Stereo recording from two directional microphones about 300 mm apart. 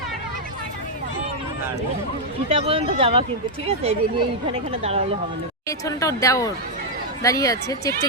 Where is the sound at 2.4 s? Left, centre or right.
Centre.